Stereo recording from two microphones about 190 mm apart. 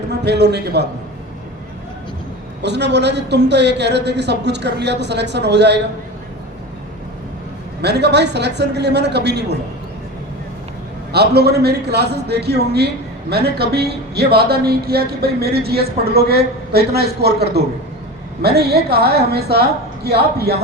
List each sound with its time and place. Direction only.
0.3 s a man's voice: 60° right (ahead or behind)
2.6 s a man's voice: 65° right (ahead or behind)
7.8 s a man's voice: 60° right (ahead or behind)
11.1 s a man's voice: 60° right (ahead or behind)